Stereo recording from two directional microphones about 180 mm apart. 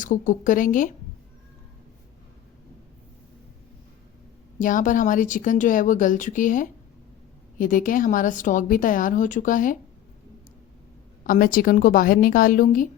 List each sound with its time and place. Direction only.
0.0 s a woman's voice: 45° left (ahead or behind)
4.6 s a woman's voice: 45° left (ahead or behind)
11.2 s a woman's voice: 50° left (ahead or behind)